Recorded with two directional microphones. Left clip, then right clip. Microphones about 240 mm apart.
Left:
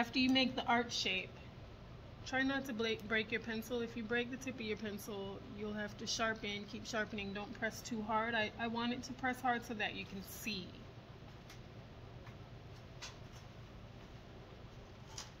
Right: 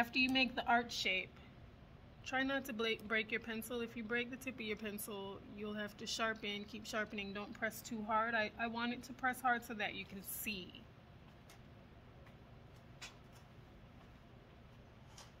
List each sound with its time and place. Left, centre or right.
0.3 s speech: right
2.2 s speech: right